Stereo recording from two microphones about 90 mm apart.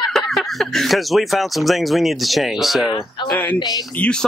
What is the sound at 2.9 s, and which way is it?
Speech, 50° left (ahead or behind).